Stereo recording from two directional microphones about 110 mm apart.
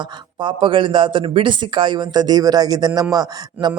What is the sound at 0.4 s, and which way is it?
A man's voice, 50° right (ahead or behind).